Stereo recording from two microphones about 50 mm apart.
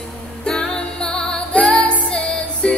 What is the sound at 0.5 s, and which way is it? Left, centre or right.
Music, centre.